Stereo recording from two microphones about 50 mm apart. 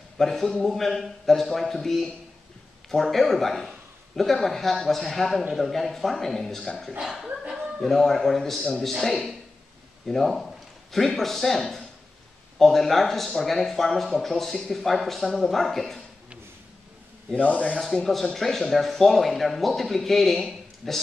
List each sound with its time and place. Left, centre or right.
0.2 s speech: centre
7.0 s speech: centre
7.6 s a man's voice: centre
17.4 s speech: left
17.7 s speech: centre